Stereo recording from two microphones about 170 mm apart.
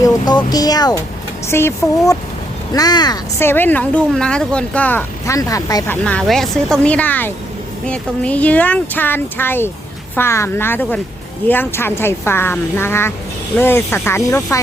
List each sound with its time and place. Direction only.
0.0 s speech: 25° left (ahead or behind)
6.1 s speech: 5° left (ahead or behind)